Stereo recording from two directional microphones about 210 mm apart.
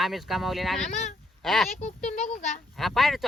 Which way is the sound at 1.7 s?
35° left (ahead or behind).